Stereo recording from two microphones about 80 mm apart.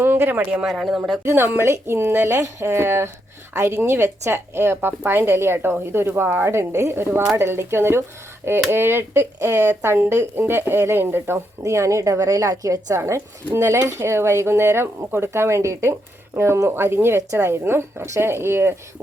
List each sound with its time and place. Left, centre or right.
0.0 s speech: right
0.7 s speech: centre
1.2 s speech: right
11.6 s speech: right